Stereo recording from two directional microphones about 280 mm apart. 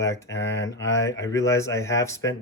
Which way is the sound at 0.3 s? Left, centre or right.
Left.